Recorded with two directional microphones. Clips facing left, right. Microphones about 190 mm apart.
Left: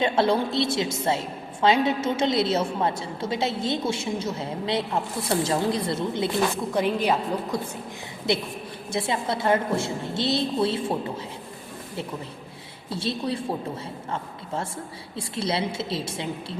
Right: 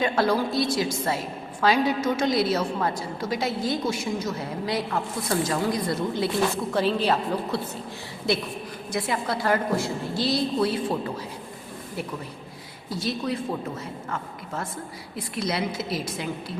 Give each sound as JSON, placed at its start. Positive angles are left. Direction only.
{"t": 0.0, "sound": "a woman's voice", "side_deg": 25}
{"t": 12.9, "sound": "a woman's voice", "side_deg": 30}